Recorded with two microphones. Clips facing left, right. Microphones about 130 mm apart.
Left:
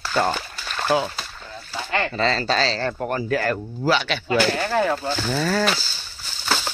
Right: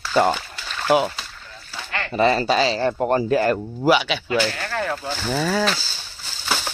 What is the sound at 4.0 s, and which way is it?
Speech, 5° right (ahead or behind).